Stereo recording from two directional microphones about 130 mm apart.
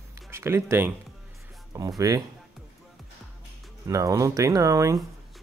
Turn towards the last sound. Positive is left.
turn(degrees=-25)  # may be behind; listen again after turning